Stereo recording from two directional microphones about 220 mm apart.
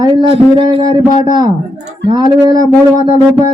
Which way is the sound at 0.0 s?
20° right (ahead or behind).